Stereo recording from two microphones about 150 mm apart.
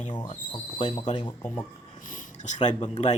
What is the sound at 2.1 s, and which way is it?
Speech, 55° left (ahead or behind).